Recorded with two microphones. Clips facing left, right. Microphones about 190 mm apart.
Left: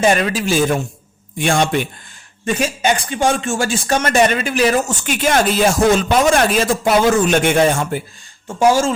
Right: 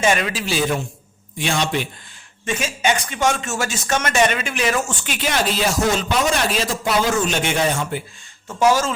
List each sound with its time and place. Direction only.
0.0 s a man's voice: 40° left (ahead or behind)
2.4 s speech: 35° left (ahead or behind)
8.4 s speech: 30° left (ahead or behind)